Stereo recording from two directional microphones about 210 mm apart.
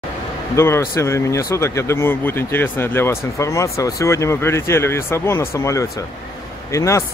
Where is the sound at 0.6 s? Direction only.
15° left (ahead or behind).